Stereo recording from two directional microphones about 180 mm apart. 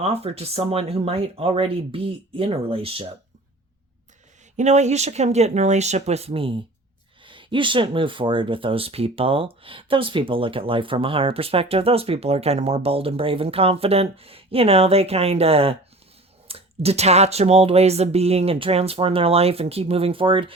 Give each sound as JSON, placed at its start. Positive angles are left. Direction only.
{"t": 0.0, "sound": "speech", "side_deg": -35}
{"t": 4.5, "sound": "speech", "side_deg": -40}